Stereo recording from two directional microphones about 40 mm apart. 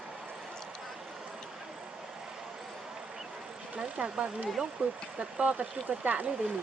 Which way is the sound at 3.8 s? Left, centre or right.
Right.